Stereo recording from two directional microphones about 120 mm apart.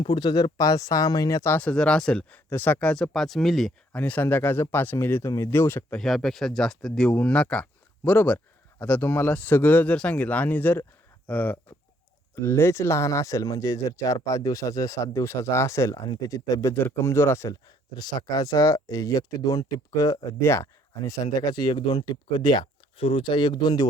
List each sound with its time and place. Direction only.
0.0 s speech: 40° left (ahead or behind); by 3.7 s centre (ahead or behind)
3.9 s speech: 10° left (ahead or behind)
6.0 s speech: centre (ahead or behind)
12.4 s speech: 25° left (ahead or behind); by 22.6 s 40° left (ahead or behind)
22.6 s speech: 50° left (ahead or behind)